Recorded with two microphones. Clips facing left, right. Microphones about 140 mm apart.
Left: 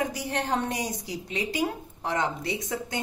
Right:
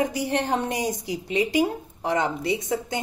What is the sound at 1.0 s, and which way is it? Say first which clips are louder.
A woman's voice: right 7 dB; 15° right (ahead or behind).